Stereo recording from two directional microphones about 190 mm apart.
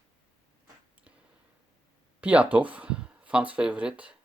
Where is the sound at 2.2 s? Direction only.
5° right (ahead or behind).